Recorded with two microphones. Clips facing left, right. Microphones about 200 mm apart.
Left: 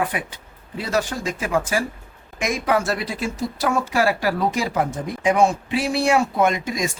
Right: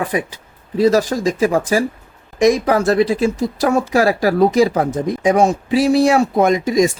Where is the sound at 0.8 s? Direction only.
40° right (ahead or behind).